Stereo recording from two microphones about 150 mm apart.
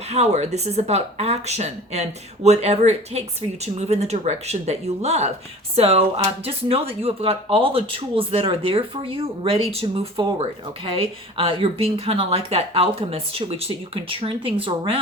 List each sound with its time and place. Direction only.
0.1 s speech: 45° right (ahead or behind)